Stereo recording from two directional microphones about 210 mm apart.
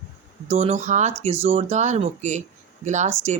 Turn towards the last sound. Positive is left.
turn(degrees=-35)  # may be behind; listen again after turning